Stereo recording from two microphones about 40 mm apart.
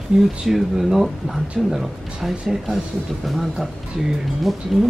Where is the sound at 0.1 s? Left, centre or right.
Right.